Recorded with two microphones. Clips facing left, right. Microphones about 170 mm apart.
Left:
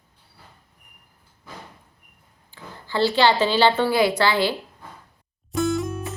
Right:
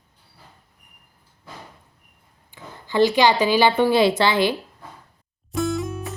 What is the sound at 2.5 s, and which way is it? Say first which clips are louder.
Speech: right 4 dB; 15° right (ahead or behind).